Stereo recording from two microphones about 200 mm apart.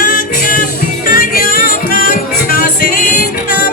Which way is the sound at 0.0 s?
45° left (ahead or behind).